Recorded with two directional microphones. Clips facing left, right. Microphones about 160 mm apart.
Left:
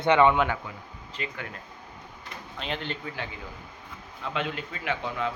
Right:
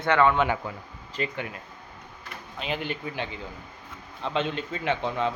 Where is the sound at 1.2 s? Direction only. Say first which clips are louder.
Right 6 dB; 40° right (ahead or behind).